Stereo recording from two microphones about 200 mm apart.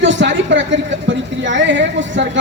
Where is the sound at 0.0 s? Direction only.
60° right (ahead or behind).